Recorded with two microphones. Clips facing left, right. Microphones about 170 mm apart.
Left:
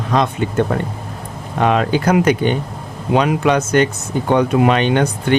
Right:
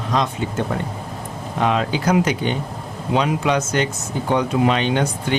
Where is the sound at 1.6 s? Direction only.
55° left (ahead or behind).